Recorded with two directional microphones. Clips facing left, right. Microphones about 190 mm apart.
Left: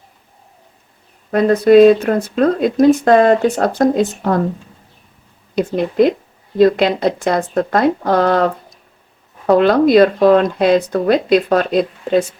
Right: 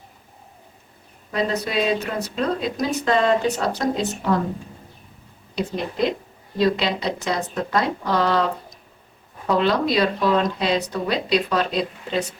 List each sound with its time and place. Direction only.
1.3 s speech: 55° left (ahead or behind)
5.5 s speech: 50° left (ahead or behind)
9.5 s speech: 50° left (ahead or behind)